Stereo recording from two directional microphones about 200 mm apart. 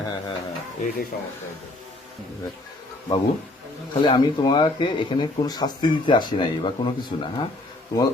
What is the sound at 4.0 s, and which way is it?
Speech, 25° left (ahead or behind).